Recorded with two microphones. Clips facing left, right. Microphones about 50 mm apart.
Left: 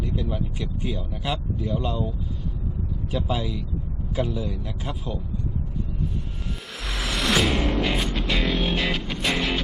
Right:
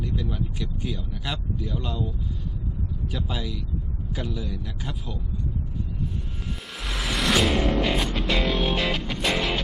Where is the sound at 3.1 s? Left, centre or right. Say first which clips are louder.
Left 6 dB; centre.